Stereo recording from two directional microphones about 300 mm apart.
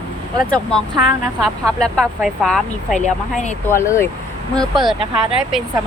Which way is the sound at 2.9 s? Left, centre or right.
Left.